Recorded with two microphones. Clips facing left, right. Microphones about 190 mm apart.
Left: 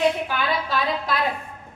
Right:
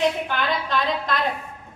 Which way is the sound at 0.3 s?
5° left (ahead or behind).